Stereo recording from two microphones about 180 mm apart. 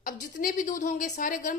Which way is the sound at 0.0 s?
50° left (ahead or behind).